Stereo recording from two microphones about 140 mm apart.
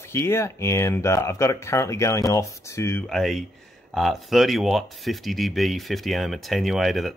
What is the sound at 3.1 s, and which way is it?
Speech, centre (ahead or behind).